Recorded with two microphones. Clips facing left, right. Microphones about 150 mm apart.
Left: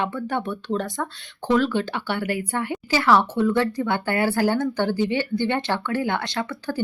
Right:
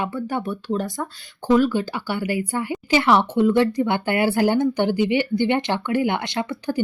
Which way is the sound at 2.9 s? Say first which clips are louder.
Right 2 dB; 20° right (ahead or behind).